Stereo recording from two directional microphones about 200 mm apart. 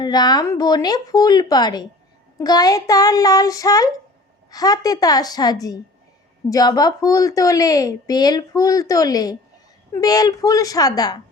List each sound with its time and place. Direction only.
0.0 s a woman's voice: 20° left (ahead or behind)